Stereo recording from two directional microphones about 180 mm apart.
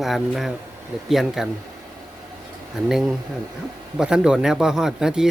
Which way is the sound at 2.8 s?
5° right (ahead or behind).